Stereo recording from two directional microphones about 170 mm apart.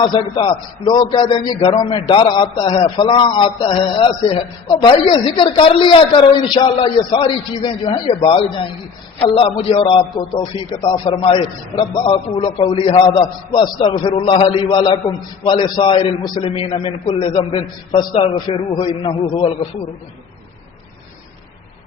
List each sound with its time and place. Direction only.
0.0 s a man's voice: 25° left (ahead or behind)